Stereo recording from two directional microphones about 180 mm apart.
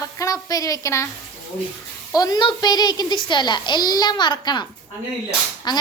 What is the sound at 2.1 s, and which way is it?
A woman's voice, 20° left (ahead or behind).